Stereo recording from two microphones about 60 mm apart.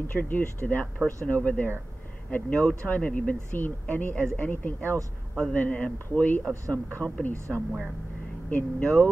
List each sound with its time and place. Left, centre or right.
0.1 s speech: left
8.5 s speech: left